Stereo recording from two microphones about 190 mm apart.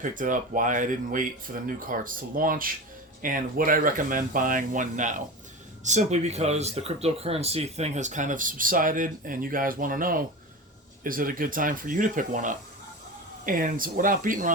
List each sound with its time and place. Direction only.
0.0 s speech: 45° right (ahead or behind)